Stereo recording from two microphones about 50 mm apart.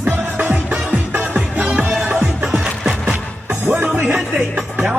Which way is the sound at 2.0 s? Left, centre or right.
Right.